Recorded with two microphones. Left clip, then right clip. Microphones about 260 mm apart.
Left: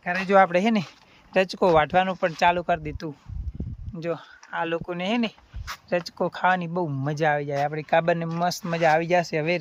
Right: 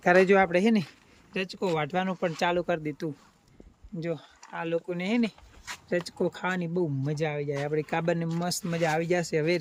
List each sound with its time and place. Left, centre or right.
0.0 s speech: centre
0.3 s speech: centre